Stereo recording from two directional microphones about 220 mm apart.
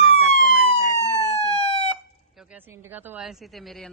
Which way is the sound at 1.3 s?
25° left (ahead or behind).